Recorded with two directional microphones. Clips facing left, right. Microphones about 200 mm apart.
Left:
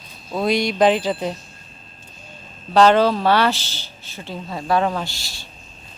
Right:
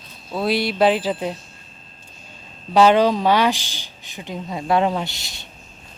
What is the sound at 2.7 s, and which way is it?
Speech, 10° right (ahead or behind).